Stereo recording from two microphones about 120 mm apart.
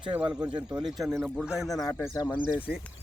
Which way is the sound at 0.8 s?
Centre (ahead or behind).